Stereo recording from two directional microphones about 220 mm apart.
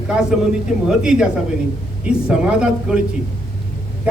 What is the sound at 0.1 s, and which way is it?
A man's voice, 5° right (ahead or behind).